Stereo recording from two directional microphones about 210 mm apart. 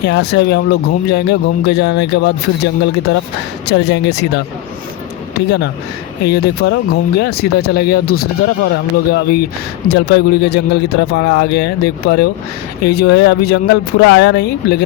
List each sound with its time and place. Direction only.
0.1 s speech: 55° left (ahead or behind)
5.5 s speech: 55° left (ahead or behind)